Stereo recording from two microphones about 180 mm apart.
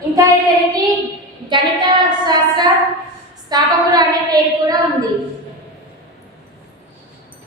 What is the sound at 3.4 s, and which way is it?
A woman's voice, 20° right (ahead or behind).